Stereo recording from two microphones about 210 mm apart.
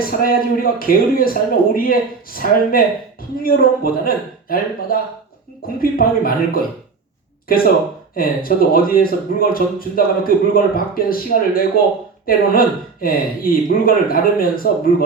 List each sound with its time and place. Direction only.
0.2 s speech: 45° left (ahead or behind)